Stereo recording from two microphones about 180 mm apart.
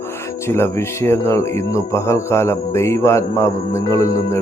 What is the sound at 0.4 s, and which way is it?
Speech, 15° left (ahead or behind).